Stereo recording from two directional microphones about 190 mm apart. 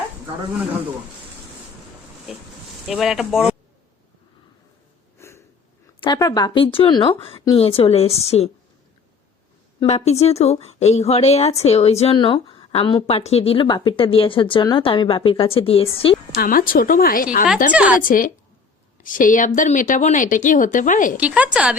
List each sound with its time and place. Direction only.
2.3 s speech: centre (ahead or behind)
5.1 s a sound: 15° left (ahead or behind)
6.0 s a woman's voice: 20° left (ahead or behind)
9.8 s a woman's voice: 35° left (ahead or behind)
16.4 s speech: 50° left (ahead or behind)
17.7 s a woman's voice: 5° right (ahead or behind)
18.0 s speech: 45° left (ahead or behind)
21.2 s a woman's voice: 10° right (ahead or behind)